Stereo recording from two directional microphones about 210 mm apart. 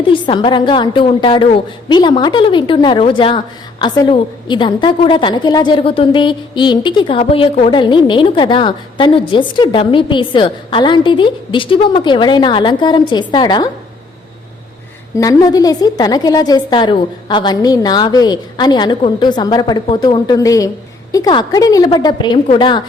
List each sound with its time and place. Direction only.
0.1 s a woman's voice: 25° left (ahead or behind)
15.2 s a woman's voice: 15° left (ahead or behind)